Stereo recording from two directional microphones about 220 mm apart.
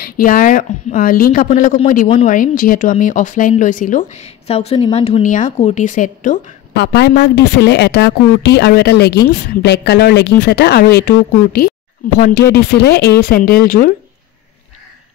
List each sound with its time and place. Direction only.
0.0 s speech: 40° left (ahead or behind)